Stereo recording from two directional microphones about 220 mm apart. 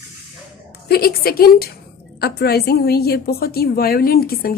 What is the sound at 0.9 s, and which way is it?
A woman's voice, 45° left (ahead or behind).